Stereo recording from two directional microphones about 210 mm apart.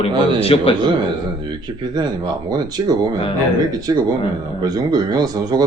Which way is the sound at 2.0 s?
20° right (ahead or behind).